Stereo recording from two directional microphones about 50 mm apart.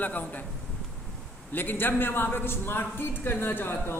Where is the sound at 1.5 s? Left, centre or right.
Left.